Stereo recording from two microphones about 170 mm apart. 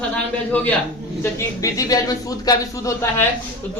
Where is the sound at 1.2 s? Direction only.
15° left (ahead or behind).